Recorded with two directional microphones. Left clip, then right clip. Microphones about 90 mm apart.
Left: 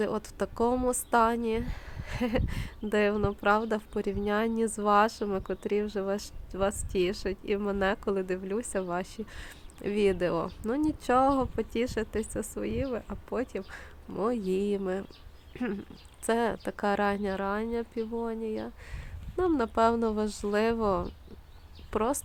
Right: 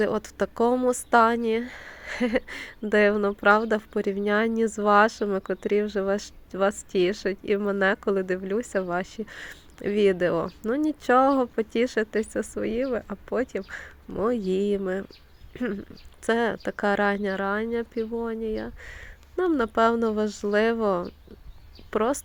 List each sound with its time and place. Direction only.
0.0 s speech: 30° right (ahead or behind)
15.5 s speech: 5° right (ahead or behind)
16.2 s a woman's voice: 25° right (ahead or behind)